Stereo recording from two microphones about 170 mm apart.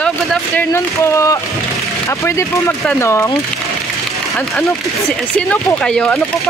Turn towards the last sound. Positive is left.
turn(degrees=5)  # may be behind; listen again after turning